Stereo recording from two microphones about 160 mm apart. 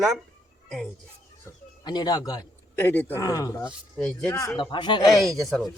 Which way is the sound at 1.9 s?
25° left (ahead or behind).